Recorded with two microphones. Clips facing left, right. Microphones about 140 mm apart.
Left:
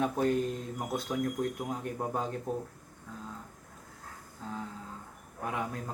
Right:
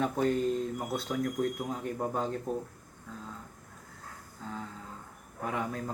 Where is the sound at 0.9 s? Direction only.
15° left (ahead or behind).